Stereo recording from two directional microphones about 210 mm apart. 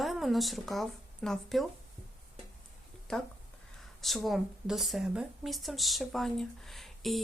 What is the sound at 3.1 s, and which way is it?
A woman's voice, 5° left (ahead or behind).